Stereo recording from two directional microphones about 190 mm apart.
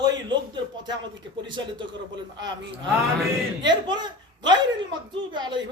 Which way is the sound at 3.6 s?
25° right (ahead or behind).